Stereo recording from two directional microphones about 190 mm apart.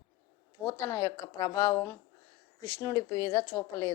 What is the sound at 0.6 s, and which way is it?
A woman's voice, 15° left (ahead or behind).